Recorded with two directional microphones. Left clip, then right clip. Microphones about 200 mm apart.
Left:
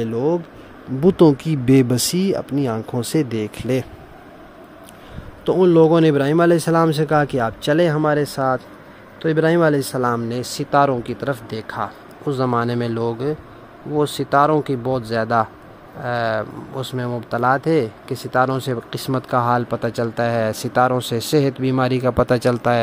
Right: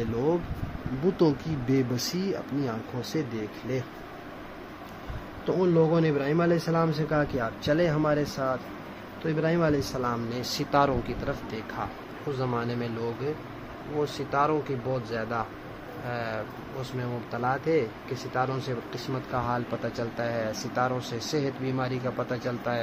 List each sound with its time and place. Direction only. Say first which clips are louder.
1.1 s speech: left 11 dB; 50° left (ahead or behind)
5.5 s speech: left 11 dB; 50° left (ahead or behind)